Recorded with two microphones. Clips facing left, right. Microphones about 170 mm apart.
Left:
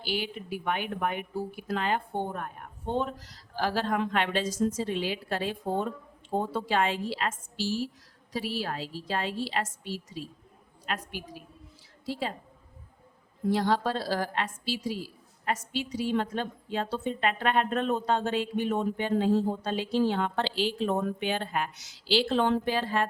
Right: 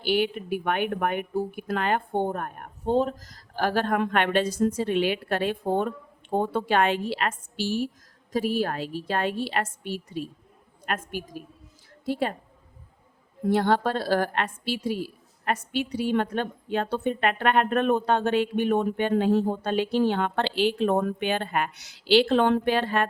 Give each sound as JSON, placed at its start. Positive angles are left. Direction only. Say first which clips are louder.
{"t": 0.0, "sound": "a woman's voice", "louder": "right 8 dB", "side_deg": -60}
{"t": 2.9, "sound": "a woman's voice", "louder": "right 7 dB", "side_deg": -40}
{"t": 8.3, "sound": "a woman's voice", "louder": "right 7 dB", "side_deg": -50}
{"t": 13.5, "sound": "a woman's voice", "louder": "right 4 dB", "side_deg": -55}